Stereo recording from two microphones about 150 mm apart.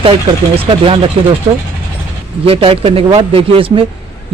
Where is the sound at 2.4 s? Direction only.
40° right (ahead or behind).